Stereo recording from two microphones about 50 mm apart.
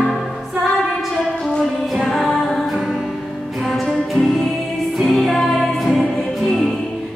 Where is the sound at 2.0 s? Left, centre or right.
Centre.